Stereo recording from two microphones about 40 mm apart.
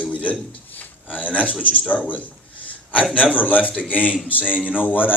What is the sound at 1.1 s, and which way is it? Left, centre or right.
Speech, left.